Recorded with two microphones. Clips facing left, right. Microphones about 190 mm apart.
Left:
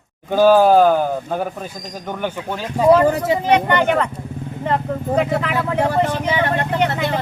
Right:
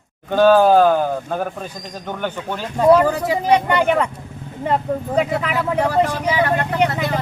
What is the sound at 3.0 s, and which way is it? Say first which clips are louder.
Speech: left 2 dB; 25° left (ahead or behind).